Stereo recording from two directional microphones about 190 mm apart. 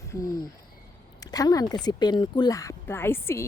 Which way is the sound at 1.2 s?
20° left (ahead or behind).